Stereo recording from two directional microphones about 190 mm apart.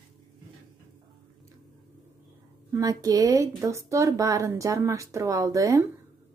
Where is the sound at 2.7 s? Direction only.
20° right (ahead or behind).